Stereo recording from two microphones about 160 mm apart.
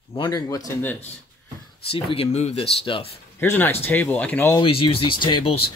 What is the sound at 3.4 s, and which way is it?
Speech, 15° left (ahead or behind).